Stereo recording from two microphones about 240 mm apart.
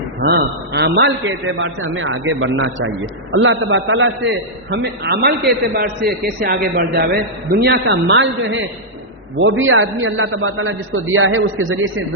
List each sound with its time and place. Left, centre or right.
0.2 s a man's voice: right